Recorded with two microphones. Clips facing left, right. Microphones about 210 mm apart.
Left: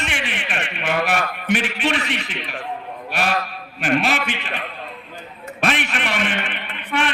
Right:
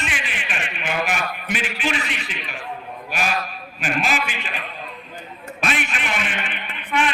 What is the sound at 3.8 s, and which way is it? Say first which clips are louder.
Speech: left 4 dB; 60° left (ahead or behind).